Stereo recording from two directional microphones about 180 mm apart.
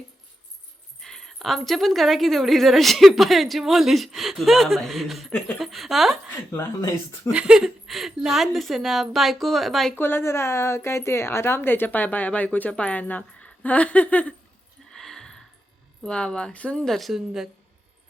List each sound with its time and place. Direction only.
1.0 s a woman's voice: centre (ahead or behind)
6.5 s speech: 15° left (ahead or behind)
7.3 s a woman's voice: 5° right (ahead or behind)
9.9 s speech: 10° left (ahead or behind)
14.9 s a sound: centre (ahead or behind)
16.0 s a woman's voice: 5° left (ahead or behind)